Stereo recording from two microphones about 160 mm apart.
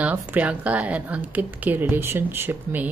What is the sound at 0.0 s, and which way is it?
Speech, 10° right (ahead or behind).